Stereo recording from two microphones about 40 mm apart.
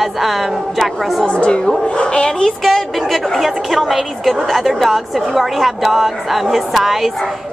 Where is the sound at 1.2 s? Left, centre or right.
Left.